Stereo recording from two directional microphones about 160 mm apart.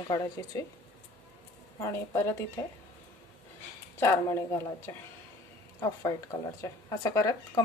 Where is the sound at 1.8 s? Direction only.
15° left (ahead or behind).